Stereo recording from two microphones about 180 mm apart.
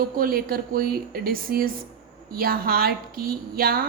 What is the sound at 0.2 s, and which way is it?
A woman's voice, 55° right (ahead or behind).